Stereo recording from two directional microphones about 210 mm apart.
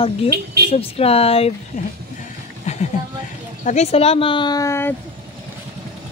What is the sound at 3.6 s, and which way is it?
Speech, 30° left (ahead or behind).